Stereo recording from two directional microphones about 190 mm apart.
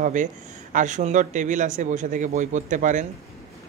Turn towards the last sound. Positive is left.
turn(degrees=-40)  # may be behind; listen again after turning